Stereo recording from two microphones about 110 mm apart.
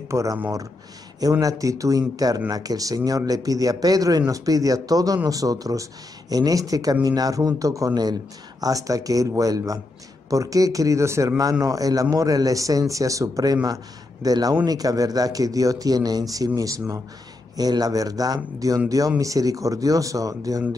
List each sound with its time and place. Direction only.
0.1 s speech: 30° right (ahead or behind)
1.4 s speech: 30° right (ahead or behind)